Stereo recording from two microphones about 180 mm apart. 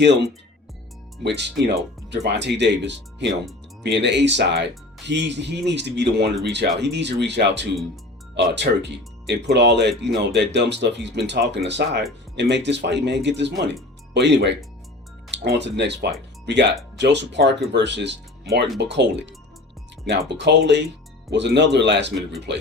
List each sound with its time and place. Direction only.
0.0 s speech: 75° right (ahead or behind)